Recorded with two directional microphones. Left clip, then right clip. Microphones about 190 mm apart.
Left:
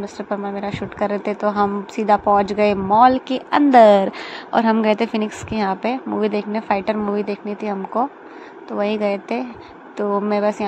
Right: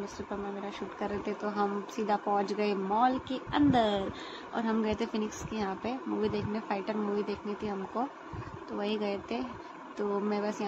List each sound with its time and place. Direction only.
0.3 s a woman's voice: 25° left (ahead or behind)